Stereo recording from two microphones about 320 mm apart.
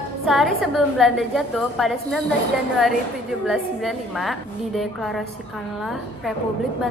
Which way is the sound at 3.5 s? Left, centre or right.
Centre.